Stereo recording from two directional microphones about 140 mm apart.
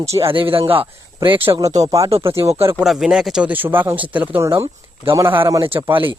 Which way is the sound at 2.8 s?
5° right (ahead or behind).